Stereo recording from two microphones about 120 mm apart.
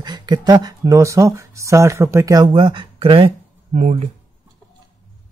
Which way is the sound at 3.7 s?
75° right (ahead or behind).